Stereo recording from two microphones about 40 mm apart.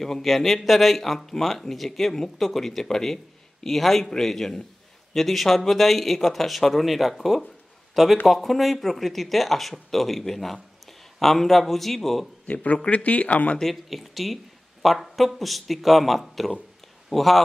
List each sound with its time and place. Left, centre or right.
0.0 s speech: centre
12.5 s speech: left
13.6 s speech: centre